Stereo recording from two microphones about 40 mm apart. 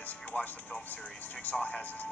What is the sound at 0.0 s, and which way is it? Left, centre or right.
A man's voice, left.